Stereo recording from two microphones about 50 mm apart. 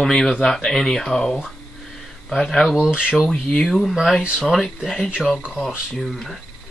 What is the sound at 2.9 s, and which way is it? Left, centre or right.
Speech, centre.